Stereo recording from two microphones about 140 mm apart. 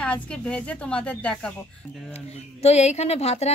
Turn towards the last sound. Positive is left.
turn(degrees=50)  # may be behind; listen again after turning